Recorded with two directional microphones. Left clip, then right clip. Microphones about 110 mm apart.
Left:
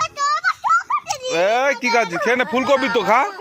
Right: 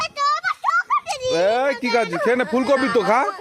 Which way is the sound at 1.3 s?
40° right (ahead or behind).